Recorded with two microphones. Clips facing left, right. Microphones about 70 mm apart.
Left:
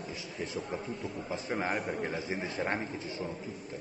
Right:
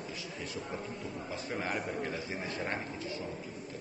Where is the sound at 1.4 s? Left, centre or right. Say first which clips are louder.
Left 3 dB; left.